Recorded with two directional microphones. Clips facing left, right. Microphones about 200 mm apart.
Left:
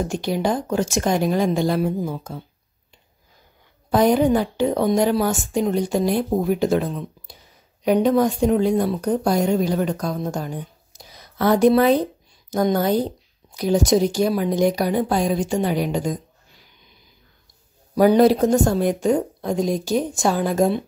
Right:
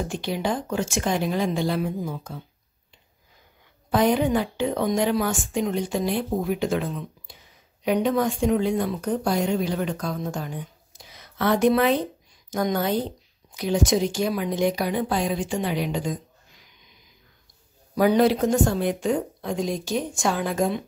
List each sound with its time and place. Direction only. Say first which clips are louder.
0.1 s a woman's voice: left 4 dB; 45° left (ahead or behind)
3.9 s a woman's voice: left 4 dB; 40° left (ahead or behind)
17.9 s a woman's voice: left 5 dB; 40° left (ahead or behind)